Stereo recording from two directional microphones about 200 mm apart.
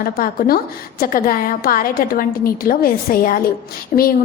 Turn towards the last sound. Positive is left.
turn(degrees=40)  # may be behind; listen again after turning